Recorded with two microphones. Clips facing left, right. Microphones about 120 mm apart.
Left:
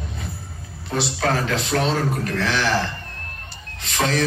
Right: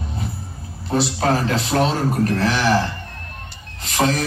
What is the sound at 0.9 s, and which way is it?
A man's voice, 35° right (ahead or behind).